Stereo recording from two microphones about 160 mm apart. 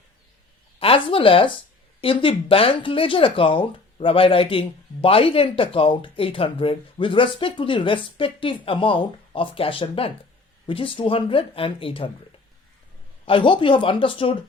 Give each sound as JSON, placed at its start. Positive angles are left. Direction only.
{"t": 0.8, "sound": "speech", "side_deg": 35}
{"t": 13.2, "sound": "speech", "side_deg": 30}